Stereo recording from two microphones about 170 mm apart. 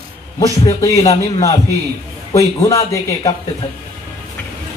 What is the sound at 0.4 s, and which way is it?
Speech, 20° left (ahead or behind).